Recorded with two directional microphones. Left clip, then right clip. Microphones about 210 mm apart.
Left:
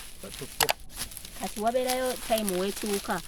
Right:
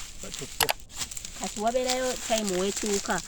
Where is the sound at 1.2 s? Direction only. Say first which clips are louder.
Even; 5° right (ahead or behind).